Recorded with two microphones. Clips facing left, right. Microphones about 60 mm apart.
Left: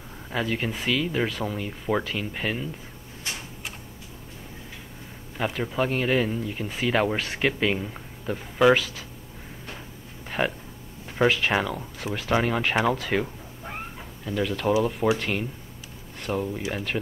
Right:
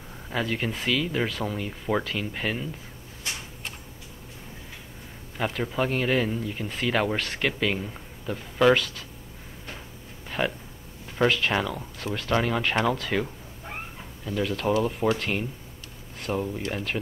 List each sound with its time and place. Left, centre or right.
0.3 s speech: centre
5.4 s speech: centre
10.4 s speech: centre
11.1 s speech: centre